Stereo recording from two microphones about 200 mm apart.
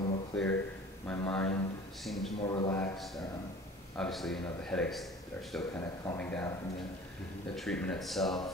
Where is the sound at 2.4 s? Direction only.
25° left (ahead or behind).